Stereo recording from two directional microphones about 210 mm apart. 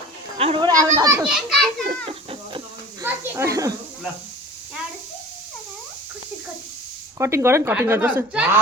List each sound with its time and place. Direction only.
0.3 s a child's voice: 25° right (ahead or behind); by 1.7 s centre (ahead or behind)
2.0 s cat: 25° right (ahead or behind)
3.0 s a woman's voice: 15° right (ahead or behind)
7.2 s a woman's voice: 15° right (ahead or behind)